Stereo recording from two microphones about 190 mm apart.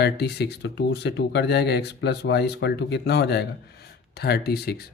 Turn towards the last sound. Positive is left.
turn(degrees=55)  # may be behind; listen again after turning